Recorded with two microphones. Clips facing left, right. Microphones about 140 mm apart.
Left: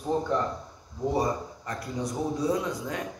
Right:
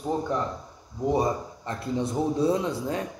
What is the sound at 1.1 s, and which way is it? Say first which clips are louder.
A man's voice: right 2 dB; 25° right (ahead or behind).